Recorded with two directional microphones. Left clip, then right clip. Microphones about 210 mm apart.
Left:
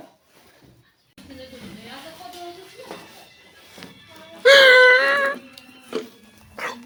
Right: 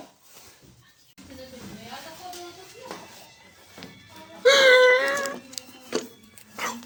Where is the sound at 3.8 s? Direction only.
35° left (ahead or behind).